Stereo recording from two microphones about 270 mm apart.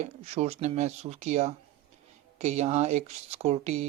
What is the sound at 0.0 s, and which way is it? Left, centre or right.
Speech, right.